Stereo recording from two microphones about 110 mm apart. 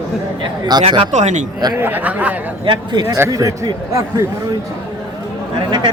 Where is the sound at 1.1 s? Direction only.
90° right.